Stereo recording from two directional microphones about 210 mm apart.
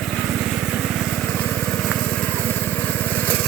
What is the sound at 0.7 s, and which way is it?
Lawn mower, centre (ahead or behind).